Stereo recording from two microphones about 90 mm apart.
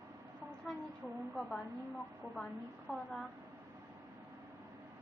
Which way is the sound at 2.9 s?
Centre (ahead or behind).